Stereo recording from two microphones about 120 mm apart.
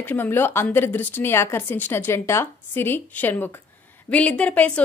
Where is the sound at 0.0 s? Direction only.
15° left (ahead or behind).